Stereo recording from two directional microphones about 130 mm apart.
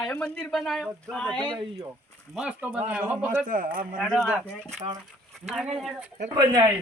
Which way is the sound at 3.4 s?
90° right.